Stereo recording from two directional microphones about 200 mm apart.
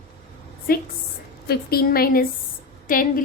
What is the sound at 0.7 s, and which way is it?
A woman's voice, 45° left (ahead or behind).